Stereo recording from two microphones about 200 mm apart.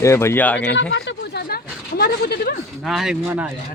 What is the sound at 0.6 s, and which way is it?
Speech, 60° left (ahead or behind).